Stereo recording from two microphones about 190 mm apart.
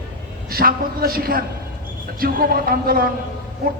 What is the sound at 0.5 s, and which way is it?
A man's voice, 50° right (ahead or behind).